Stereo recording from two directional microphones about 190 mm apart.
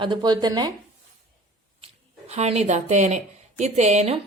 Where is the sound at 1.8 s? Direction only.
35° right (ahead or behind).